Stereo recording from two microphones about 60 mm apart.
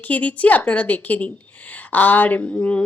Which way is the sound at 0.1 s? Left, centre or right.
Left.